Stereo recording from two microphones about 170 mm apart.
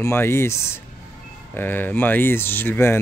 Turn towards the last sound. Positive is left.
turn(degrees=15)  # may be behind; listen again after turning